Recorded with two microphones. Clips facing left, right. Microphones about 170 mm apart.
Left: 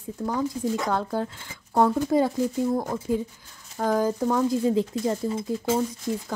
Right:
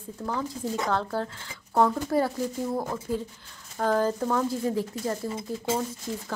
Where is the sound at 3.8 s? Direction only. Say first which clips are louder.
Left 1 dB; 10° left (ahead or behind).